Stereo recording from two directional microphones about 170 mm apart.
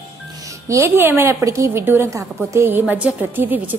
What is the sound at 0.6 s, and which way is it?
A woman's voice, 15° right (ahead or behind).